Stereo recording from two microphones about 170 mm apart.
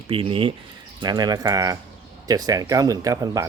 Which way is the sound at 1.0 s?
25° right (ahead or behind).